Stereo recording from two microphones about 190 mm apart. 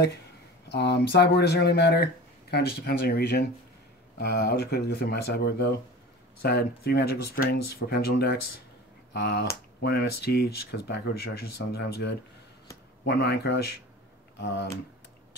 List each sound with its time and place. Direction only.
0.7 s speech: 60° left (ahead or behind)